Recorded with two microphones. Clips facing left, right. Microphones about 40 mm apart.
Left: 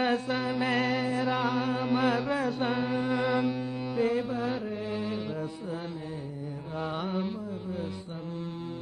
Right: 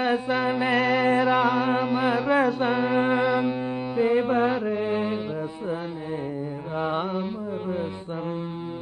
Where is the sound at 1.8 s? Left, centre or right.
Centre.